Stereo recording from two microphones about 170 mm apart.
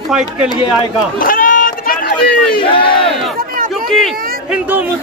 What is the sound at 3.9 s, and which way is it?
Speech, centre (ahead or behind).